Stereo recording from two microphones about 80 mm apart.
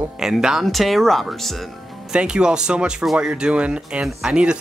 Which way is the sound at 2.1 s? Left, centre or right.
Centre.